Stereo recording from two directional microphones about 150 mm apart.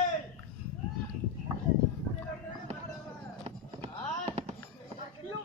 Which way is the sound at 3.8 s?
45° right (ahead or behind).